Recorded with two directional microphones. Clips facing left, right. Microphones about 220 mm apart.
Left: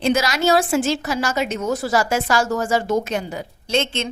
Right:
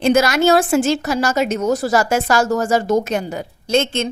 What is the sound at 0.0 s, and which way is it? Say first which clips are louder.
A woman's voice: right 5 dB; 50° right (ahead or behind).